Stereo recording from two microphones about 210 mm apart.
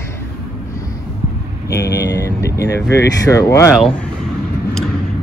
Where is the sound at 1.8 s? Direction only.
50° left (ahead or behind).